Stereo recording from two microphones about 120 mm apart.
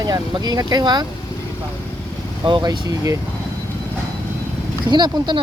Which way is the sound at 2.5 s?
40° right (ahead or behind).